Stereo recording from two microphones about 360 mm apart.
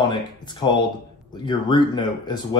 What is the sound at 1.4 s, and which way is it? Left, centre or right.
Speech, centre.